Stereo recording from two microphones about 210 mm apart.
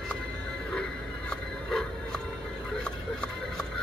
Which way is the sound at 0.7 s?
5° left (ahead or behind).